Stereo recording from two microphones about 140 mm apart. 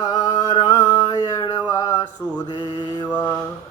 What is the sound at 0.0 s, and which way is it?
Music, 30° left (ahead or behind).